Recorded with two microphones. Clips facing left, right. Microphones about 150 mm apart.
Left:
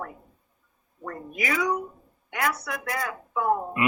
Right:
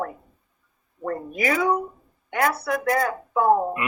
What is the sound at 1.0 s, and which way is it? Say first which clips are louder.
A woman's voice: right 7 dB; 35° right (ahead or behind).